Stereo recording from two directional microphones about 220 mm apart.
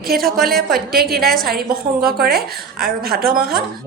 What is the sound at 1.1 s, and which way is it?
A woman's voice, 45° right (ahead or behind).